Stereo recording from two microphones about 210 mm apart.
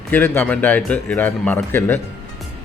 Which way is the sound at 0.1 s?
10° left (ahead or behind).